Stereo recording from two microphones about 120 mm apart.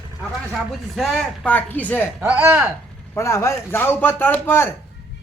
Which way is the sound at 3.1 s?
25° left (ahead or behind).